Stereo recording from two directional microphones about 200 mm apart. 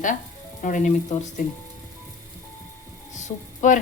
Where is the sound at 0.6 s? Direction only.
40° left (ahead or behind).